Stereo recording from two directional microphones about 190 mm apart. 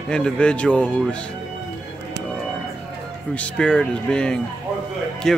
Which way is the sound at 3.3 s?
5° left (ahead or behind).